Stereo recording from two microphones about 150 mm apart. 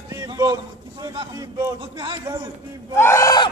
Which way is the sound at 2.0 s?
30° right (ahead or behind).